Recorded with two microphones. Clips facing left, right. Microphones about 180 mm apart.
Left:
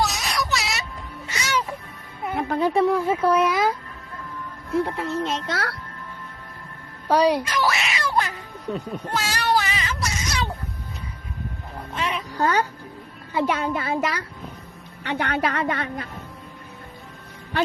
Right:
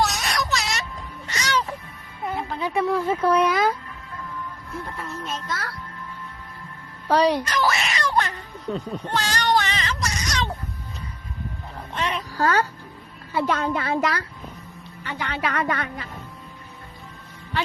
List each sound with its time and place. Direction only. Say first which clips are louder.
0.0 s a sound: right 1 dB; centre (ahead or behind)
1.3 s music: right 1 dB; 10° left (ahead or behind)
2.3 s a woman's voice: left 5 dB; 45° left (ahead or behind)
2.8 s speech: left 2 dB; 15° left (ahead or behind)
4.7 s a child's voice: left 11 dB; 70° left (ahead or behind)
7.1 s a sound: left 1 dB; 10° left (ahead or behind)
11.9 s speech: even; centre (ahead or behind)
12.3 s speech: even; 20° left (ahead or behind)
15.0 s a woman's voice: left 5 dB; 60° left (ahead or behind)
15.5 s speech: even; 25° left (ahead or behind)